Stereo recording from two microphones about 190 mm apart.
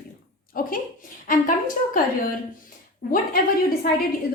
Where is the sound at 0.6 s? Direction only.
50° left (ahead or behind).